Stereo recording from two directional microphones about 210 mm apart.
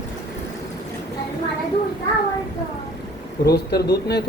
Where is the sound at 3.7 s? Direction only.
50° left (ahead or behind).